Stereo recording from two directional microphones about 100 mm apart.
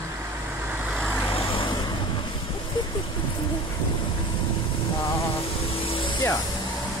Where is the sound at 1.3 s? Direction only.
60° left (ahead or behind).